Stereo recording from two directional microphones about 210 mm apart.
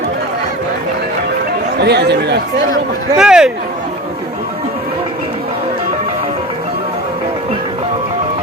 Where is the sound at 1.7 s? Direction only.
50° right (ahead or behind).